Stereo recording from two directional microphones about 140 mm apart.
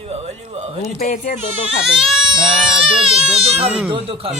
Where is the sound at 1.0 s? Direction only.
85° left.